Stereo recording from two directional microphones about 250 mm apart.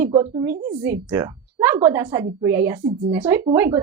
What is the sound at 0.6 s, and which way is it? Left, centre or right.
Speech, centre.